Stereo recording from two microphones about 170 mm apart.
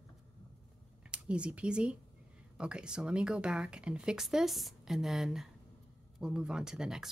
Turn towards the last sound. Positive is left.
turn(degrees=-5)  # may be behind; listen again after turning